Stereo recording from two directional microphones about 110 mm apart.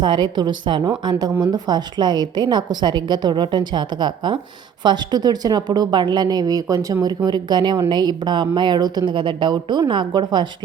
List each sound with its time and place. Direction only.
0.0 s a woman's voice: 45° right (ahead or behind)